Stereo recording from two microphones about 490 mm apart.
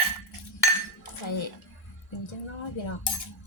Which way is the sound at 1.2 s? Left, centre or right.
Left.